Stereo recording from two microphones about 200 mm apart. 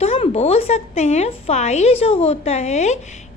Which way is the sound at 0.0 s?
30° left (ahead or behind).